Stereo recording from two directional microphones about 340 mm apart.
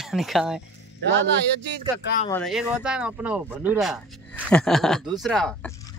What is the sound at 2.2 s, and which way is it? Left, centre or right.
Speech, centre.